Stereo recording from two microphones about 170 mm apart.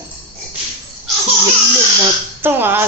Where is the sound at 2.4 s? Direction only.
15° right (ahead or behind).